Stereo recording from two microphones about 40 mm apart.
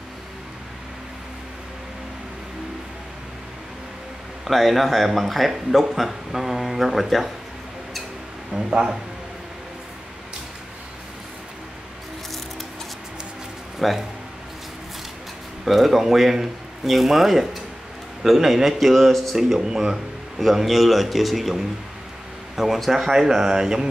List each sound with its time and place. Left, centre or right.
4.5 s a man's voice: centre
8.5 s a man's voice: right
13.7 s speech: centre
15.6 s a man's voice: centre
19.3 s a man's voice: centre